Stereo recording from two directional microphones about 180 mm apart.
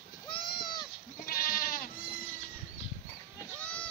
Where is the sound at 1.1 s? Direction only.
55° left (ahead or behind).